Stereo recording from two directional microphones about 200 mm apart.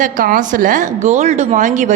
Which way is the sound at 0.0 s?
40° right (ahead or behind).